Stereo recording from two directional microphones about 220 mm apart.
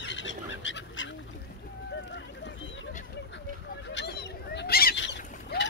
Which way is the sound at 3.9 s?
50° left (ahead or behind).